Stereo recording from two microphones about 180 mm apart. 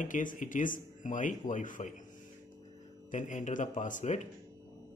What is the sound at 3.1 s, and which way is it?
Speech, 45° left (ahead or behind).